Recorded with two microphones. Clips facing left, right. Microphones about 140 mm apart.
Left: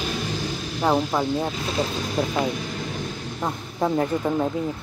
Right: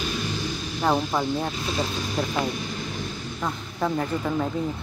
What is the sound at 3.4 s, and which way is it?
Speech, 20° left (ahead or behind).